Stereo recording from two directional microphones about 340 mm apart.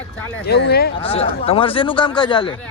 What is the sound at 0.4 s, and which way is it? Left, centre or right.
Speech, left.